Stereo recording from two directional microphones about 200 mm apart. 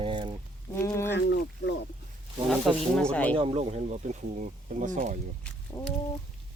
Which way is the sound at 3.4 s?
30° right (ahead or behind).